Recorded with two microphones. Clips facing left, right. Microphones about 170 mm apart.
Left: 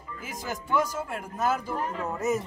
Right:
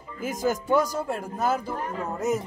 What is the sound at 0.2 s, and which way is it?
Speech, 45° right (ahead or behind).